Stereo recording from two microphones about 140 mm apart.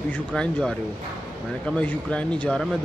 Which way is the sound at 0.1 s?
10° left (ahead or behind).